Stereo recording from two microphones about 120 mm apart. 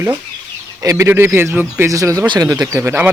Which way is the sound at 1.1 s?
15° right (ahead or behind).